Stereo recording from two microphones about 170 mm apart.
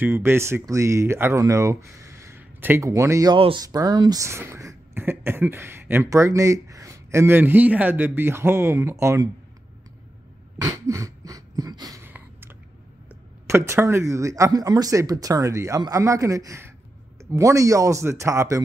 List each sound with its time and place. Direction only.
0.0 s speech: 15° right (ahead or behind)
3.3 s speech: 30° right (ahead or behind)
10.6 s a sound: 15° right (ahead or behind)
13.5 s speech: 15° right (ahead or behind)